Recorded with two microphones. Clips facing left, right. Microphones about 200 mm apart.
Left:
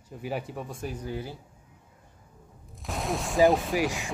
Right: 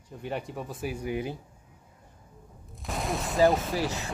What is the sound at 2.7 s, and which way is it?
Fusillade, centre (ahead or behind).